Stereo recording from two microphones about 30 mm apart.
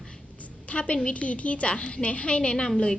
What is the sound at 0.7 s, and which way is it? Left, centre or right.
A woman's voice, left.